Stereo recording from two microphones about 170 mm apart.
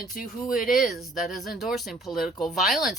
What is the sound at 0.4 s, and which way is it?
Speech, 55° left (ahead or behind).